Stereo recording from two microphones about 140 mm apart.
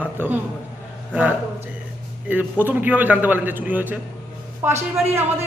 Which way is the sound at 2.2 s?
15° right (ahead or behind).